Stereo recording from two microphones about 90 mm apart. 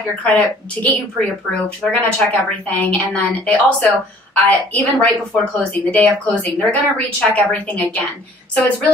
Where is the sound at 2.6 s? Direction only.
15° left (ahead or behind).